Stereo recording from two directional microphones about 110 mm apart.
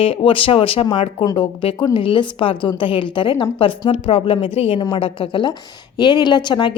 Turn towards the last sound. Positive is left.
turn(degrees=45)  # may be behind; listen again after turning